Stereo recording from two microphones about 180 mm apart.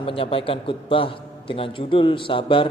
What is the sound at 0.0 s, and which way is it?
A man's voice, 30° left (ahead or behind).